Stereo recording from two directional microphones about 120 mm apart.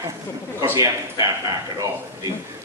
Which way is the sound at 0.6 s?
25° right (ahead or behind).